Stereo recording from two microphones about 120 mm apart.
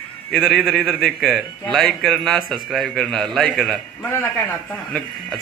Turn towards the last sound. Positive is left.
turn(degrees=5)  # may be behind; listen again after turning